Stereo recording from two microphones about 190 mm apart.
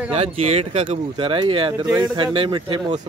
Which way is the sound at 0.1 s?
30° right (ahead or behind).